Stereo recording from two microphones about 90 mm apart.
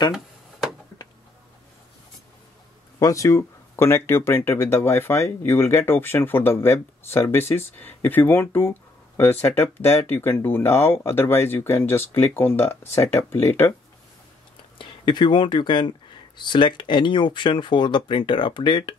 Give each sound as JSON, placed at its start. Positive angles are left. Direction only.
{"t": 0.1, "sound": "a sound", "side_deg": -5}
{"t": 3.0, "sound": "speech", "side_deg": 35}
{"t": 14.8, "sound": "speech", "side_deg": 65}